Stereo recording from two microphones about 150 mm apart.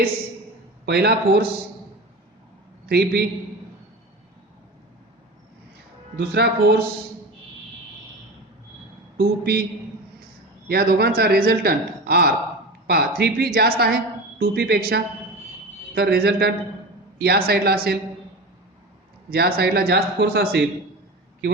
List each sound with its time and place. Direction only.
0.9 s a woman's voice: 90° right
2.8 s a man's voice: 90° right
6.1 s a woman's voice: 90° right
9.1 s a woman's voice: 90° right
10.7 s a woman's voice: 90° right
19.3 s a woman's voice: 90° right